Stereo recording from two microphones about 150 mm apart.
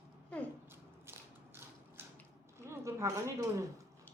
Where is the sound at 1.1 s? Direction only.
15° right (ahead or behind).